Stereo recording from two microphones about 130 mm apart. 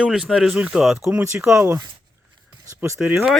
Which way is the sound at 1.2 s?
20° right (ahead or behind).